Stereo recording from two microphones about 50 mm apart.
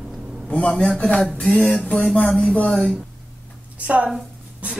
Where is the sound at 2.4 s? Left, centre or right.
Left.